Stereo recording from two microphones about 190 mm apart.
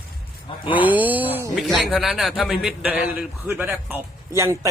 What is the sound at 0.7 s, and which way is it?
Speech, 10° right (ahead or behind).